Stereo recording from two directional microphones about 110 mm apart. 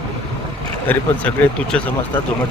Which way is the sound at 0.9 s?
15° left (ahead or behind).